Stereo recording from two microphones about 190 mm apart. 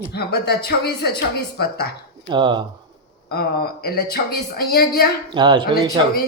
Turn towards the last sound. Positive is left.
turn(degrees=-25)  # may be behind; listen again after turning